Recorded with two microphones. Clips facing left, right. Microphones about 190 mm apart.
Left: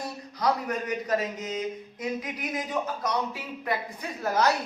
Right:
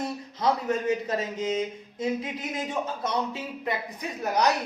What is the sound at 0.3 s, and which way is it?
Speech, 25° right (ahead or behind).